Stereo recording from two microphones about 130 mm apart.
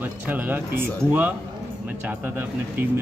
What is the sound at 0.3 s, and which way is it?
A man's voice, 15° right (ahead or behind).